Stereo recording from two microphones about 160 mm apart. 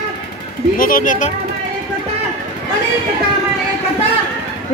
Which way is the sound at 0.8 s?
60° left (ahead or behind).